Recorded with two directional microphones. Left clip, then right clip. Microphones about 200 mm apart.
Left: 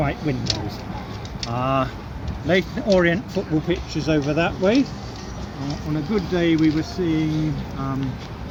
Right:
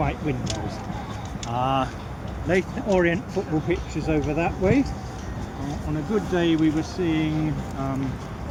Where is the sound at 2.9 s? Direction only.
60° left (ahead or behind).